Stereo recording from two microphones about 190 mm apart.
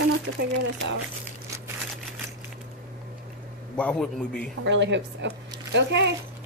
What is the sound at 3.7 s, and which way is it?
Speech, 5° left (ahead or behind).